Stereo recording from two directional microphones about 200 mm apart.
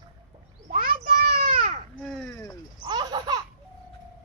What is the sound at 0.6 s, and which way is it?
Children playing, 40° right (ahead or behind).